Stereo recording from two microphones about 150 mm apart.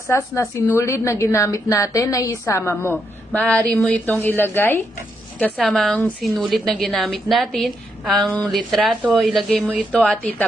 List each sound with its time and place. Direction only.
0.3 s a woman's voice: 20° left (ahead or behind)
5.5 s a woman's voice: centre (ahead or behind)